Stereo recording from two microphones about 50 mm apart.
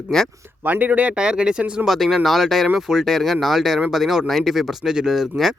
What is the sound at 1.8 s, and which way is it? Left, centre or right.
Speech, centre.